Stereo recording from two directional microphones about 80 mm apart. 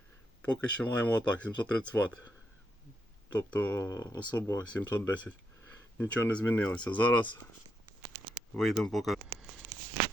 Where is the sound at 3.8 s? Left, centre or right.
Left.